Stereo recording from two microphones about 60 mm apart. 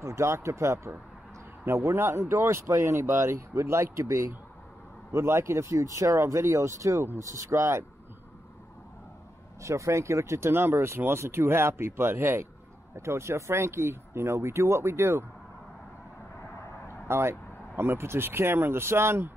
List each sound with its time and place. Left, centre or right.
0.0 s speech: right
9.6 s speech: right
17.1 s speech: right